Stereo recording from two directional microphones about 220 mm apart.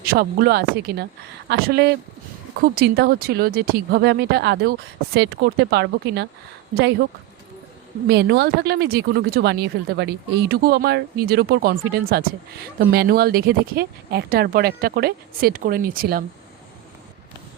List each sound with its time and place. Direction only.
0.0 s speech: 45° right (ahead or behind)
8.0 s speech: 50° right (ahead or behind)